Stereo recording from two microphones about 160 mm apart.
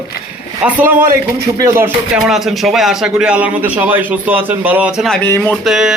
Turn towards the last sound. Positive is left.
turn(degrees=-5)  # may be behind; listen again after turning